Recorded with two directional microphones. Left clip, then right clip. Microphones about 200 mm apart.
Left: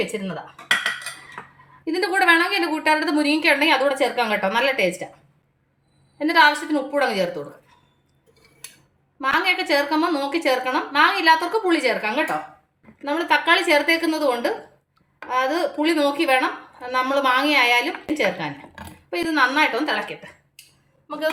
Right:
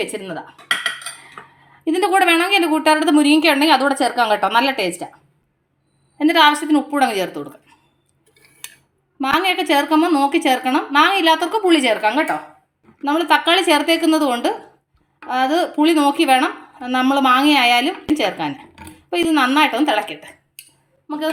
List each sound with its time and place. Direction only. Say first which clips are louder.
0.0 s a woman's voice: right 2 dB; 45° right (ahead or behind)
1.8 s speech: right 5 dB; 35° right (ahead or behind)
6.1 s a woman's voice: right 3 dB; 40° right (ahead or behind)
9.2 s a woman's voice: right 3 dB; 45° right (ahead or behind)
13.0 s a woman's voice: right 4 dB; 35° right (ahead or behind)